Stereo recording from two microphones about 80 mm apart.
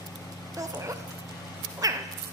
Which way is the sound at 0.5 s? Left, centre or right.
Right.